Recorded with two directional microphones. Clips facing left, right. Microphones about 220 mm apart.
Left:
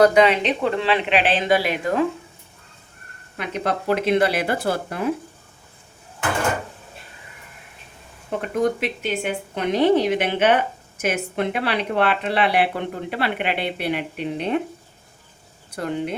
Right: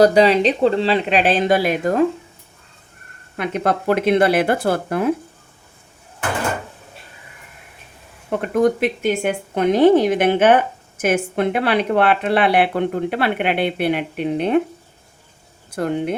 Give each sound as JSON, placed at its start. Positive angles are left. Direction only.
{"t": 0.0, "sound": "speech", "side_deg": -35}
{"t": 3.3, "sound": "a woman's voice", "side_deg": -50}
{"t": 8.5, "sound": "a woman's voice", "side_deg": -50}
{"t": 15.7, "sound": "speech", "side_deg": -55}